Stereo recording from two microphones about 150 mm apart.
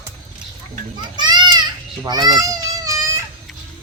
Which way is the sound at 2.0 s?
25° right (ahead or behind).